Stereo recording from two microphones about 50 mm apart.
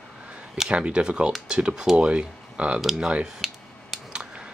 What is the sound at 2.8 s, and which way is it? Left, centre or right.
Speech, centre.